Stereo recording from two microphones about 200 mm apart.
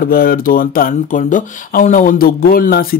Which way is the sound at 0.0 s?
45° left (ahead or behind).